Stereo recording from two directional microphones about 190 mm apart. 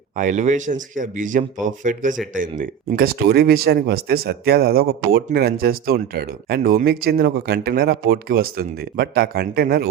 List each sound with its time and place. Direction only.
0.2 s speech: 40° right (ahead or behind)